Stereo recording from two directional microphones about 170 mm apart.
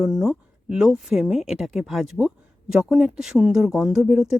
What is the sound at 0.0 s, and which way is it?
Speech, centre (ahead or behind).